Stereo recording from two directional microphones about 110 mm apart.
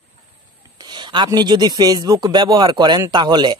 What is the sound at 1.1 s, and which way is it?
Speech, 40° right (ahead or behind).